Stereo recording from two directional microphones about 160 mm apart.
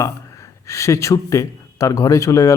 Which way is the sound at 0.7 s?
20° left (ahead or behind).